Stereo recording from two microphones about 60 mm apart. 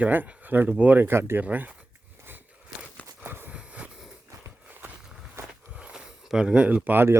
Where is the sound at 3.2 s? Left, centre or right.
Right.